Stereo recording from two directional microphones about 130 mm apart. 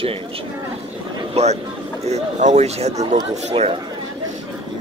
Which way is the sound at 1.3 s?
60° right (ahead or behind).